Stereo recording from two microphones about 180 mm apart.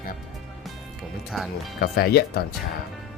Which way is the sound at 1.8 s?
60° left (ahead or behind).